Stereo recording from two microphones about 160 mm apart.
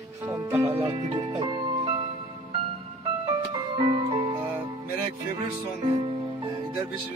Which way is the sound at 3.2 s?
25° right (ahead or behind).